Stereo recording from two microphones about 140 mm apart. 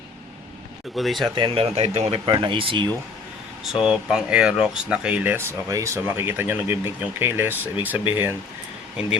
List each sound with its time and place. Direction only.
0.9 s speech: centre (ahead or behind)
1.4 s speech: 40° right (ahead or behind)
3.6 s speech: 5° right (ahead or behind)